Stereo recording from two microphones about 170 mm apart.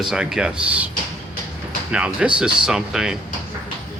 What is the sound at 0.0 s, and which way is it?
Speech, 5° right (ahead or behind).